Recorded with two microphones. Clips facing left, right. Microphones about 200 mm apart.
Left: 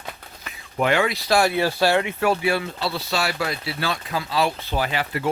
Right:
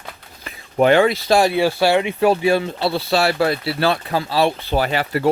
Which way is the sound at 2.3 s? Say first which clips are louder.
Right 6 dB; 35° right (ahead or behind).